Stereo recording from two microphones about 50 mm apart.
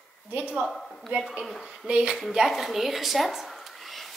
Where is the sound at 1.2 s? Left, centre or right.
Centre.